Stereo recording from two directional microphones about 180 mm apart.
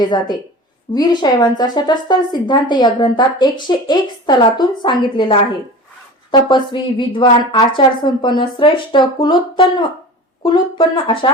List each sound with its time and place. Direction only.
0.0 s a woman's voice: 25° left (ahead or behind)